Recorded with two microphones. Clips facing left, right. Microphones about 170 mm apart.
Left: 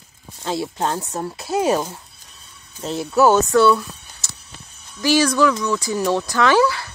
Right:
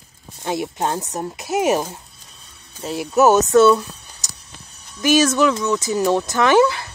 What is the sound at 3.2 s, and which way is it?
Speech, 20° right (ahead or behind).